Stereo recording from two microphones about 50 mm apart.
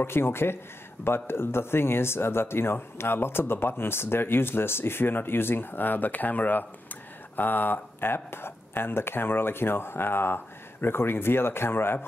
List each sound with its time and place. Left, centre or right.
0.0 s speech: left